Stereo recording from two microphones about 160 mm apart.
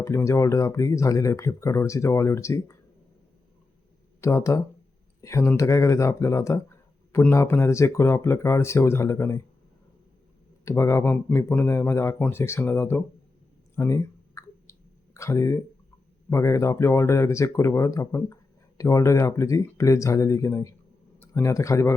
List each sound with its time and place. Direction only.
0.0 s speech: 15° left (ahead or behind)
4.2 s speech: 20° left (ahead or behind)
10.7 s speech: 15° left (ahead or behind)
13.7 s clicking: 20° left (ahead or behind)
16.3 s speech: 20° left (ahead or behind)